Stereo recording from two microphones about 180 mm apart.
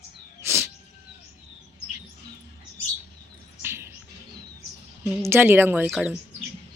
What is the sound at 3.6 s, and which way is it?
Music, 15° right (ahead or behind).